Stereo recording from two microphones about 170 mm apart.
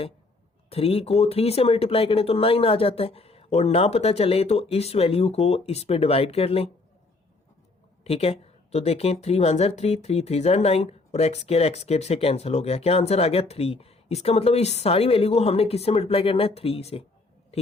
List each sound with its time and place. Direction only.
0.7 s speech: 35° left (ahead or behind)
8.0 s speech: 35° left (ahead or behind)